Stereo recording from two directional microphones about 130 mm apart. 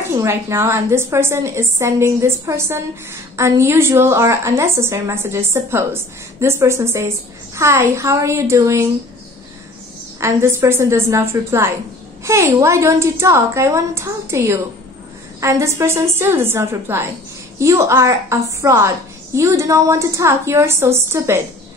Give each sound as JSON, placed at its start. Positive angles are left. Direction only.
{"t": 0.1, "sound": "a woman's voice", "side_deg": -20}
{"t": 10.2, "sound": "a woman's voice", "side_deg": -20}